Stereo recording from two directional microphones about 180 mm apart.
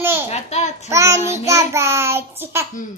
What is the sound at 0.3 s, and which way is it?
Babbling, 40° left (ahead or behind).